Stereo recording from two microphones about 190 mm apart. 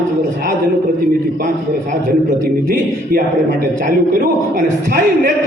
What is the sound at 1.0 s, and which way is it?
A man's voice, 45° right (ahead or behind).